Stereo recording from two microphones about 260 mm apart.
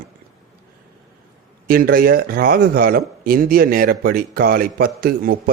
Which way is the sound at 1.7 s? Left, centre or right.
Right.